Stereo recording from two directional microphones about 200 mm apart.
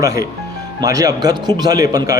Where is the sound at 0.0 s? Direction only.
15° right (ahead or behind).